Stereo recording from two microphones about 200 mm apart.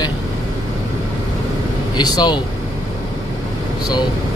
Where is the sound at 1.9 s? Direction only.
20° left (ahead or behind).